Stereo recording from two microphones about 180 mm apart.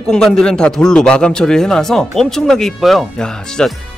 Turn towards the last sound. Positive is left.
turn(degrees=5)  # may be behind; listen again after turning